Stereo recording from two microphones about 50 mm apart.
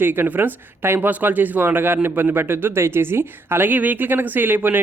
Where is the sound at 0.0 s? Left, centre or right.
Right.